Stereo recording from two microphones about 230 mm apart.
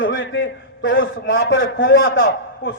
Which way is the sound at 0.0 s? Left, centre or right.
Left.